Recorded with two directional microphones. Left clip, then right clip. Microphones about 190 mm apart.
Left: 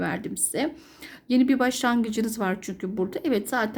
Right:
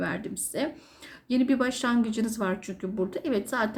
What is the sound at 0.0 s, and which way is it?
A woman's voice, 45° left (ahead or behind).